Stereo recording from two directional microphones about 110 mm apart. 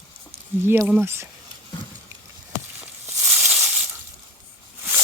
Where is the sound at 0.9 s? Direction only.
20° right (ahead or behind).